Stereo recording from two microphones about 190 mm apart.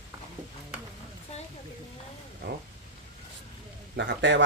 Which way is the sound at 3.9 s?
65° right (ahead or behind).